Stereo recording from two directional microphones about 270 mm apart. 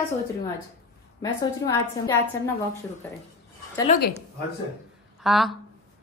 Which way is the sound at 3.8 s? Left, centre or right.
Left.